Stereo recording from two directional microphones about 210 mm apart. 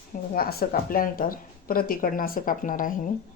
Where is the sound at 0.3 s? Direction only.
45° left (ahead or behind).